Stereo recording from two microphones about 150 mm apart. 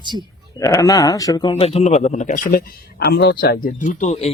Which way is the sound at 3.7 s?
55° left (ahead or behind).